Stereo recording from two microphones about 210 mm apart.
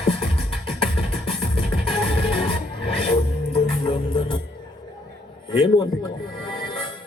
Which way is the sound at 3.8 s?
25° left (ahead or behind).